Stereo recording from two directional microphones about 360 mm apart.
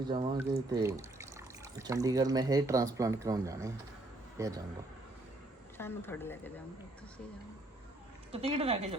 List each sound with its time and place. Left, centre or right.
0.0 s speech: centre
5.7 s speech: centre
8.3 s speech: centre